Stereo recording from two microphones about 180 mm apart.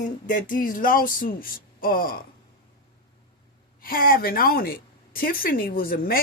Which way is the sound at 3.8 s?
55° left (ahead or behind).